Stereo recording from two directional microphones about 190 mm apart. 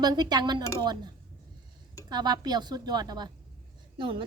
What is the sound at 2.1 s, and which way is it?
Speech, 20° right (ahead or behind).